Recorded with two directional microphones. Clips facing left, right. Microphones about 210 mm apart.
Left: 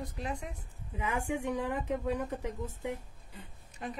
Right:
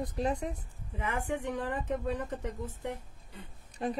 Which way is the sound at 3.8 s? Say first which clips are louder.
Right 7 dB; 35° right (ahead or behind).